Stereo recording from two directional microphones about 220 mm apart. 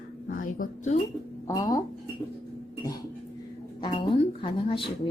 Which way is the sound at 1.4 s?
15° left (ahead or behind).